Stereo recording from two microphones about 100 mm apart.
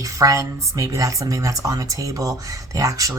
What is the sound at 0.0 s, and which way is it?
Speech, 35° right (ahead or behind).